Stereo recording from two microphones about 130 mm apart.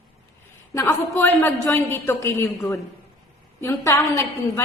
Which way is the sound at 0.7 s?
20° left (ahead or behind).